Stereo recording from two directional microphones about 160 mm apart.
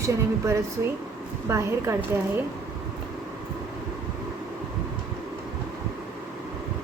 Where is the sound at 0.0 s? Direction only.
20° right (ahead or behind).